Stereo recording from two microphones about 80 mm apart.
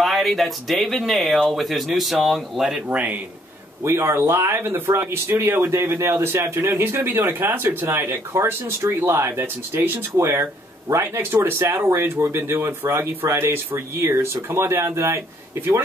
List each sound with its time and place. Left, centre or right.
0.0 s speech: centre
2.9 s a man's voice: centre
3.8 s speech: right